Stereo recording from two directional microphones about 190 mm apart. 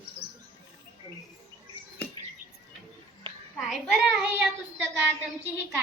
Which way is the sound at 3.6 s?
Centre (ahead or behind).